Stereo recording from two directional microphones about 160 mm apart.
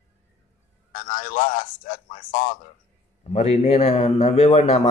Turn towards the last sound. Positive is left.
turn(degrees=40)  # may be behind; listen again after turning